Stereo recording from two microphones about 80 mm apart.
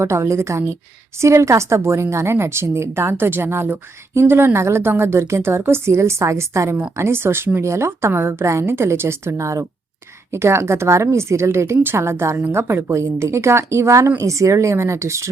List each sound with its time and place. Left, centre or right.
0.0 s a woman's voice: right